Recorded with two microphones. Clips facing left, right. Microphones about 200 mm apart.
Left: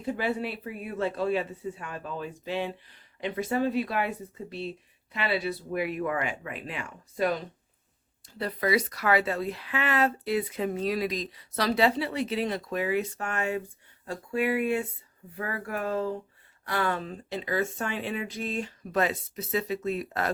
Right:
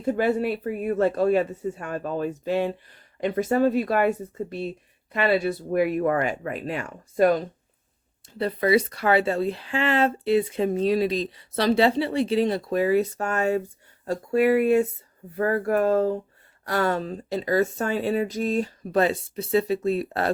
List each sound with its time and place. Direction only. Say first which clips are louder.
0.0 s speech: right 7 dB; 45° right (ahead or behind)
8.4 s speech: right 6 dB; 25° right (ahead or behind)